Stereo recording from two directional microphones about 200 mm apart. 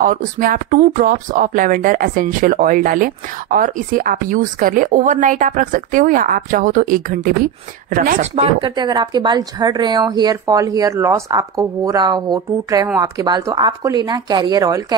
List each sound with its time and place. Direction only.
0.0 s speech: 45° right (ahead or behind)
8.4 s speech: 25° right (ahead or behind)